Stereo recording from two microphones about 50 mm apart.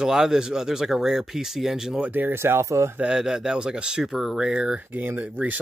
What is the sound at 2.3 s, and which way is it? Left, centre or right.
Speech, right.